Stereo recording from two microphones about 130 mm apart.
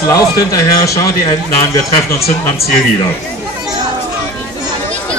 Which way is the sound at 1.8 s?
50° left (ahead or behind).